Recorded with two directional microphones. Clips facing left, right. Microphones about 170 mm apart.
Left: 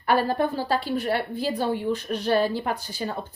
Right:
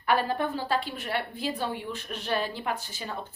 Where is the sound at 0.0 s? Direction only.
40° left (ahead or behind).